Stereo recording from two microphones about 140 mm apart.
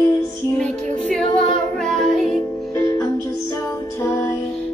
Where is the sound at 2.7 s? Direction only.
20° left (ahead or behind).